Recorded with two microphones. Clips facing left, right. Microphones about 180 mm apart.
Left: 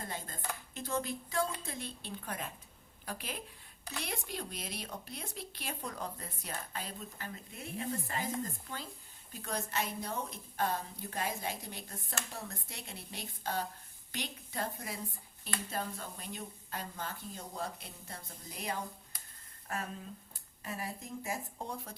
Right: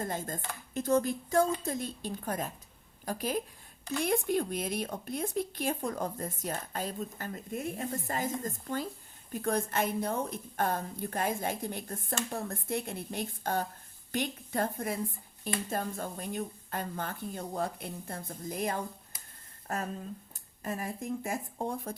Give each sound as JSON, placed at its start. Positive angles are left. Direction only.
{"t": 0.0, "sound": "a woman's voice", "side_deg": -45}